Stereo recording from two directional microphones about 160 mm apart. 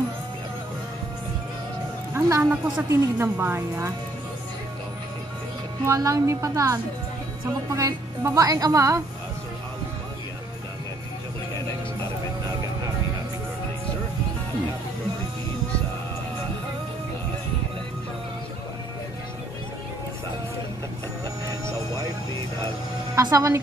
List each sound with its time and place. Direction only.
2.1 s a woman's voice: 20° right (ahead or behind)
5.9 s a woman's voice: 20° right (ahead or behind)
23.1 s speech: 20° right (ahead or behind)